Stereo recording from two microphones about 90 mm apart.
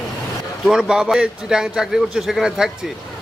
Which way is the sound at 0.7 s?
10° right (ahead or behind).